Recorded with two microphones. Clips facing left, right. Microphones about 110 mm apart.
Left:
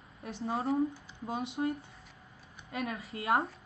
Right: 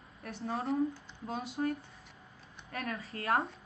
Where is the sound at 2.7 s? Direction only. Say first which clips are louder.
Left 2 dB; 15° left (ahead or behind).